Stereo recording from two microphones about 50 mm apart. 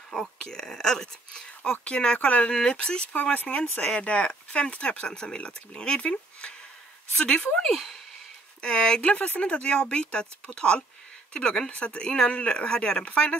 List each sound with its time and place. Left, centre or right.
0.1 s speech: centre
1.7 s speech: left
2.5 s speech: centre
3.2 s speech: left; by 8.0 s centre
8.5 s speech: centre